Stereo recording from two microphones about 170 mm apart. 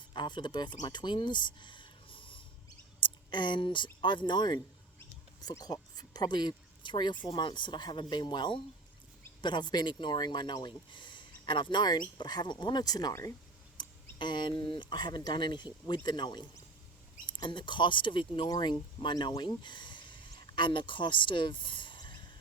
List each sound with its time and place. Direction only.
0.1 s speech: 25° left (ahead or behind)
4.9 s mouse: 20° left (ahead or behind)
7.3 s speech: 30° left (ahead or behind)
13.7 s a sound: 25° left (ahead or behind)
14.6 s speech: 25° left (ahead or behind)